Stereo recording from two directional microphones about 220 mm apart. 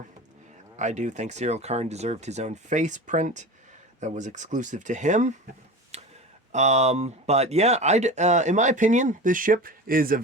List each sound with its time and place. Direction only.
0.8 s speech: 30° right (ahead or behind)
5.9 s a sound: 30° right (ahead or behind)
6.5 s speech: 30° right (ahead or behind)